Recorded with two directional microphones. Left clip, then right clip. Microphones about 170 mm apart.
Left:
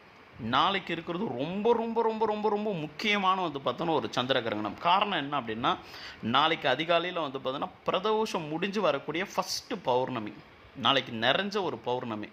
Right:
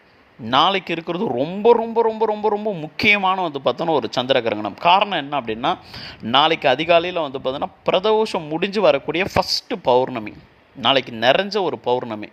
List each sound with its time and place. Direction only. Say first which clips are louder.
0.5 s speech: right 10 dB; 40° right (ahead or behind)
1.8 s speech: right 9 dB; 15° right (ahead or behind)
3.0 s speech: right 11 dB; 30° right (ahead or behind)